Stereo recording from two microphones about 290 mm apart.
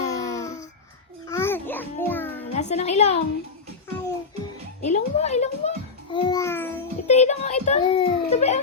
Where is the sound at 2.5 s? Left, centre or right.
Left.